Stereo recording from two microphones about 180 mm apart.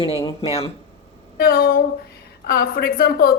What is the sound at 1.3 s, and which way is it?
A woman's voice, 60° left (ahead or behind).